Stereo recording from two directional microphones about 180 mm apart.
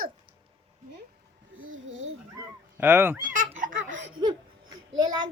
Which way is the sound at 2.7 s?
10° right (ahead or behind).